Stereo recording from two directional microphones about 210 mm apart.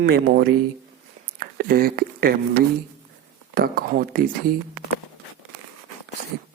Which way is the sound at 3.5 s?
45° right (ahead or behind).